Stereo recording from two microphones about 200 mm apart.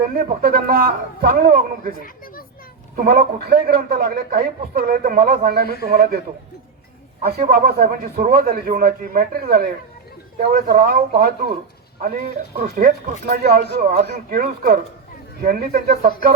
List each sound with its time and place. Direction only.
0.2 s a man's voice: 50° right (ahead or behind)
2.0 s speech: 45° left (ahead or behind)
2.9 s a man's voice: 45° right (ahead or behind)
7.2 s a man's voice: 50° right (ahead or behind)
12.0 s a man's voice: 45° right (ahead or behind)